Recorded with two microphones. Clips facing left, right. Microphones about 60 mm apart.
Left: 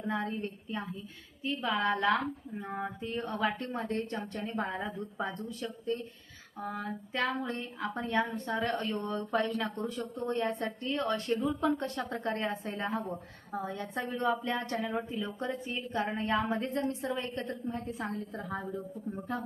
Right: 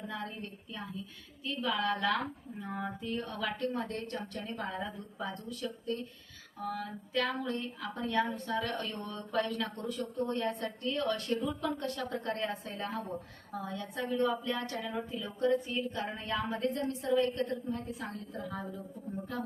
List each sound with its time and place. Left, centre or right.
0.1 s speech: left